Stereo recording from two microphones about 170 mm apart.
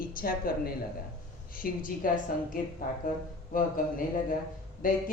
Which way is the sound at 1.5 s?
55° left (ahead or behind).